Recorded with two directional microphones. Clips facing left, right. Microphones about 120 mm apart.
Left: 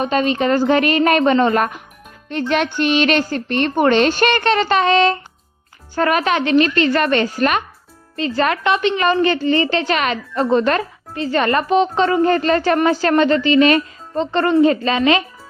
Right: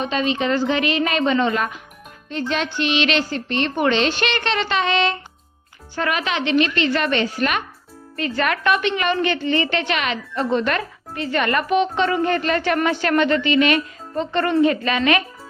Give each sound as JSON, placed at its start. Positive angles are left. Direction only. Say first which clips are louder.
{"t": 0.0, "sound": "speech", "louder": "left 4 dB", "side_deg": 45}
{"t": 8.1, "sound": "a woman's voice", "louder": "left 4 dB", "side_deg": 30}